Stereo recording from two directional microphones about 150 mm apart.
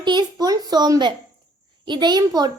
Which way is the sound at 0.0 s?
30° right (ahead or behind).